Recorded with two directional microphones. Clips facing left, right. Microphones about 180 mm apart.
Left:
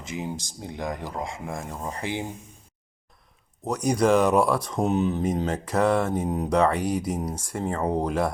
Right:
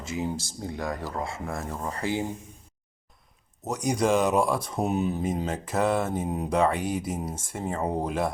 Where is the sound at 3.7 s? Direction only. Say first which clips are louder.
Left 3 dB; 20° right (ahead or behind).